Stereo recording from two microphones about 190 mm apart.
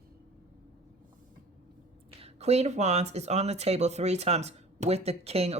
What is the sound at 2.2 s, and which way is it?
Speech, 35° right (ahead or behind).